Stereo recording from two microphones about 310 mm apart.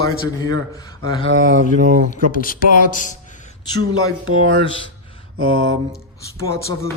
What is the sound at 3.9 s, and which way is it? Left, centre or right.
Speech, right.